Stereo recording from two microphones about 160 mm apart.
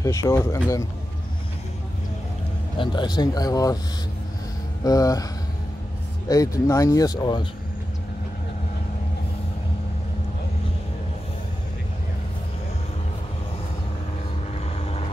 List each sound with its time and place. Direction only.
0.0 s speech: 20° left (ahead or behind)
2.8 s speech: 30° left (ahead or behind)
4.8 s speech: 20° left (ahead or behind)
6.2 s speech: 20° left (ahead or behind)